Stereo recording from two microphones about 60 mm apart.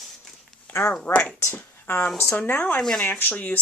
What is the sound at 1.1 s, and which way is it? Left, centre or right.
Speech, left.